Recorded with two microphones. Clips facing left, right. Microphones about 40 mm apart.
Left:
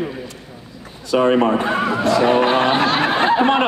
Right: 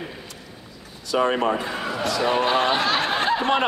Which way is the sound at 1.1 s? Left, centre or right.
Left.